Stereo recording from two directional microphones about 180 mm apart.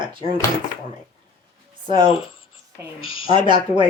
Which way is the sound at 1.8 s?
25° right (ahead or behind).